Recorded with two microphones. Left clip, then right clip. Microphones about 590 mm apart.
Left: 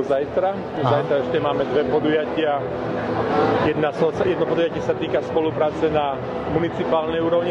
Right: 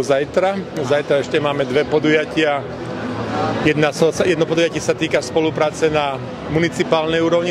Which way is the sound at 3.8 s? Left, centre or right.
Right.